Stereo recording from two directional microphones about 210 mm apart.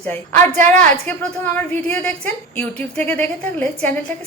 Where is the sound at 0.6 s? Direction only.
35° right (ahead or behind).